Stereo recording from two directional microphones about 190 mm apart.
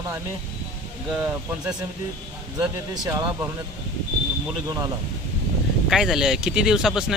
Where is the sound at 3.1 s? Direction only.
15° right (ahead or behind).